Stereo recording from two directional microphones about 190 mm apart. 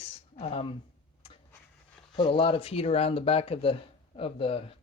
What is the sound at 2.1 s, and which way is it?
Speech, 25° left (ahead or behind).